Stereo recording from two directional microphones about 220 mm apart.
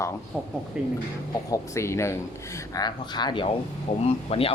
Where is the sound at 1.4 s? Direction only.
15° left (ahead or behind).